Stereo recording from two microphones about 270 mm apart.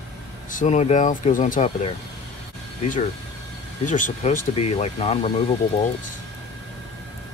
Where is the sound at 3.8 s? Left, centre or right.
Left.